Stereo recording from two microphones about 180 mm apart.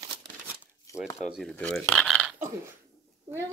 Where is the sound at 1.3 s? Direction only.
5° left (ahead or behind).